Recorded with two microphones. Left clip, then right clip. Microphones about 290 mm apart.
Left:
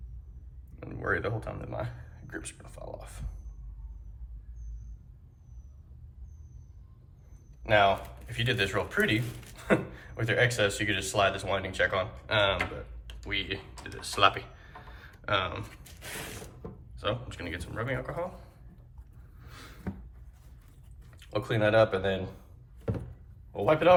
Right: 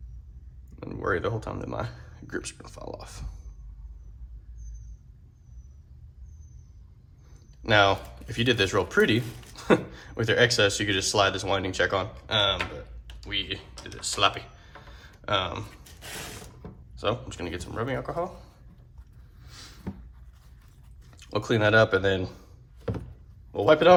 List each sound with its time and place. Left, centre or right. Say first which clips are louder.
0.8 s speech: right 3 dB; centre
7.6 s speech: right 3 dB; right; by 12.6 s centre
13.1 s computer keyboard: right 2 dB; centre
16.9 s speech: right 4 dB; centre
19.4 s a sound: right 1 dB; centre
21.3 s speech: right 3 dB; right
23.5 s a man's voice: right 5 dB; right